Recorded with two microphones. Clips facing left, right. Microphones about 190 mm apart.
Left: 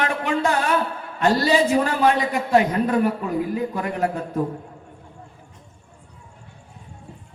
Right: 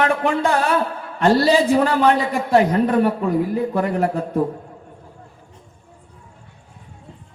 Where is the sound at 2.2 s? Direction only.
35° right (ahead or behind).